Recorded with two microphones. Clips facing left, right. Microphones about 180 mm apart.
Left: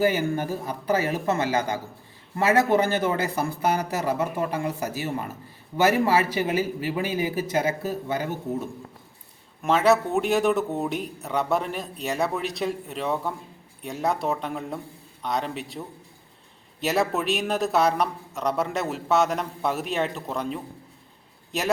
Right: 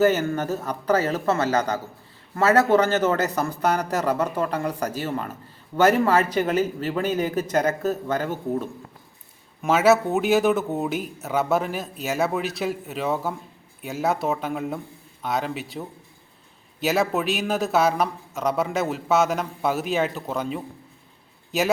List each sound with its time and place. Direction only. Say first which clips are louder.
0.0 s speech: right 3 dB; 10° left (ahead or behind)
8.2 s speech: right 3 dB; 50° right (ahead or behind)
9.6 s a man's voice: right 2 dB; 5° right (ahead or behind)
16.8 s a man's voice: right 2 dB; centre (ahead or behind)